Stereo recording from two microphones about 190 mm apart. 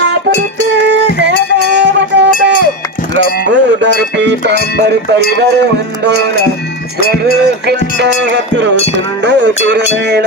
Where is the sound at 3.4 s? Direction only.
70° right (ahead or behind).